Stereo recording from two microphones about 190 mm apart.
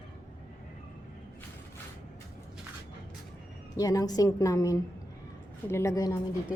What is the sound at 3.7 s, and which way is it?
A woman's voice, 20° left (ahead or behind).